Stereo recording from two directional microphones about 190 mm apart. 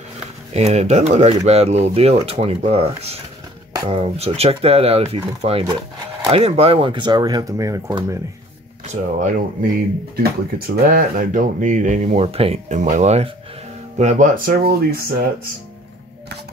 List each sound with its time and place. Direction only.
0.5 s speech: 35° right (ahead or behind); by 8.2 s 15° right (ahead or behind)
8.8 s speech: 40° right (ahead or behind)
10.9 s speech: 45° right (ahead or behind)